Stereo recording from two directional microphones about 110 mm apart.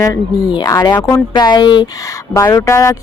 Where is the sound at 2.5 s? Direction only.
30° left (ahead or behind).